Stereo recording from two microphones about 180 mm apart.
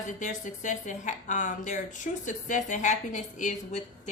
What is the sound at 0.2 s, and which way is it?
Speech, 45° left (ahead or behind).